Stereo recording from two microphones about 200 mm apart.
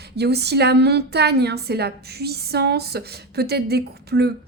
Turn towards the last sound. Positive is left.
turn(degrees=-55)  # may be behind; listen again after turning